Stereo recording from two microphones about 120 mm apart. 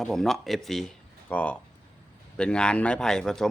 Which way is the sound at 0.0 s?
5° left (ahead or behind).